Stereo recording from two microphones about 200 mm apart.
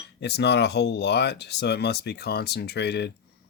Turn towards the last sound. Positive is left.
turn(degrees=55)  # may be behind; listen again after turning